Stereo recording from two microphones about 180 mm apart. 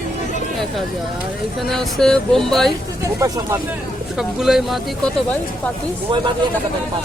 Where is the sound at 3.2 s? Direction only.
15° right (ahead or behind).